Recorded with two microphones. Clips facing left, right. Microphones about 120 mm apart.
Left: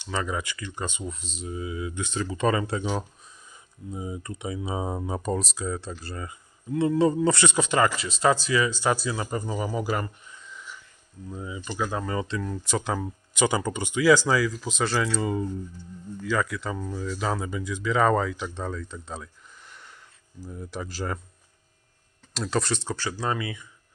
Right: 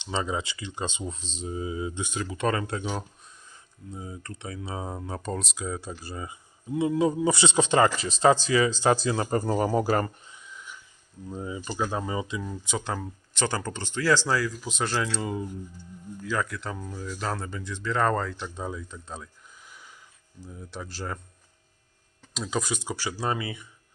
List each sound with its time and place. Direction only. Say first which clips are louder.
0.0 s speech: even; 20° right (ahead or behind)
2.1 s speech: left 3 dB; centre (ahead or behind)
3.9 s speech: left 5 dB; 15° left (ahead or behind); by 7.3 s 10° right (ahead or behind)
7.3 s speech: right 1 dB; 25° right (ahead or behind); by 9.4 s 40° right (ahead or behind)
9.4 s speech: right 5 dB; 50° right (ahead or behind)
10.3 s a sound: left 1 dB; 5° right (ahead or behind)
11.3 s speech: right 1 dB; 30° right (ahead or behind)
11.8 s speech: left 1 dB; 20° right (ahead or behind)
12.6 s speech: left 4 dB; centre (ahead or behind)
18.6 s speech: even; 10° right (ahead or behind)
19.0 s a sound: left 2 dB; centre (ahead or behind)
20.5 s speech: left 4 dB; centre (ahead or behind)
22.4 s speech: left 3 dB; centre (ahead or behind)